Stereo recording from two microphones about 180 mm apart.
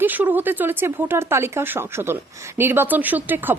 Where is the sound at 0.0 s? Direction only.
10° right (ahead or behind).